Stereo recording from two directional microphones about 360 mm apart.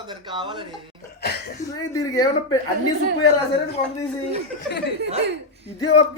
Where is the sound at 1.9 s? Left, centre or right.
Centre.